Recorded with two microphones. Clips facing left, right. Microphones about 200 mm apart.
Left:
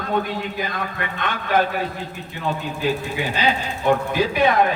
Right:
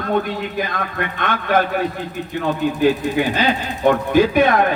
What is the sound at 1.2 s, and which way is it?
Speech, 55° right (ahead or behind).